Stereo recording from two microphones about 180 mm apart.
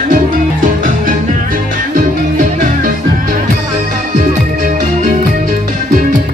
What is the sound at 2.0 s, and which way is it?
Music, 45° right (ahead or behind).